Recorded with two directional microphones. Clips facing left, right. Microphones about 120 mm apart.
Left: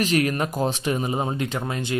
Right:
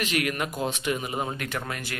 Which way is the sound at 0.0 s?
35° left (ahead or behind).